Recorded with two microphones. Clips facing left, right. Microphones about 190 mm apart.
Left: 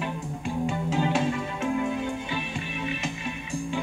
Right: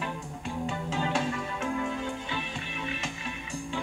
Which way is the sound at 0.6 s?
15° left (ahead or behind).